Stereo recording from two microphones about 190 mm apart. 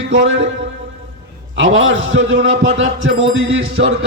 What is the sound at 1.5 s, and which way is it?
A man's voice, 85° right.